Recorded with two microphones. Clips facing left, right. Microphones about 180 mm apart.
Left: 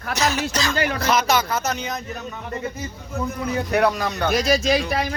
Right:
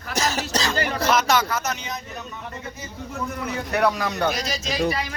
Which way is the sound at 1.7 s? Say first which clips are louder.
Left 5 dB; 45° left (ahead or behind).